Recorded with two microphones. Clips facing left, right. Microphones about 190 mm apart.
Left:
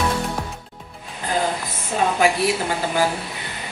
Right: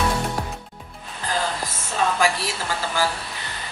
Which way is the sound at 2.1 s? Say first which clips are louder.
Left 5 dB; 20° left (ahead or behind).